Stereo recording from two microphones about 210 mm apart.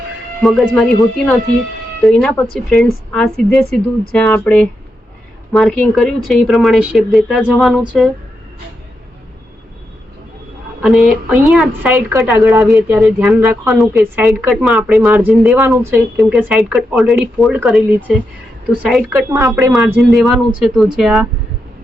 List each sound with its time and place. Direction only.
0.4 s a woman's voice: centre (ahead or behind)
2.0 s a woman's voice: centre (ahead or behind)
10.8 s a woman's voice: centre (ahead or behind)
12.6 s a woman's voice: centre (ahead or behind)
16.1 s a woman's voice: centre (ahead or behind)
19.1 s speech: 15° right (ahead or behind)
19.7 s a woman's voice: centre (ahead or behind)